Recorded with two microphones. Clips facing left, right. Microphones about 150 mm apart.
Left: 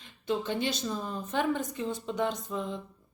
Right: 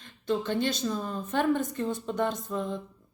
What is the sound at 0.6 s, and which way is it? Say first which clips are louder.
Speech: right 3 dB; 50° right (ahead or behind).